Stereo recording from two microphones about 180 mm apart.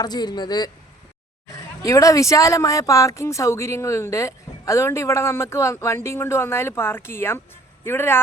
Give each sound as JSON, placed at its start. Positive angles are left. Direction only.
{"t": 0.0, "sound": "a man's voice", "side_deg": 20}
{"t": 1.8, "sound": "speech", "side_deg": 20}